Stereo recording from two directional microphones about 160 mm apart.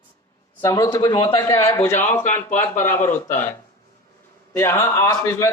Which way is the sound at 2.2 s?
50° left (ahead or behind).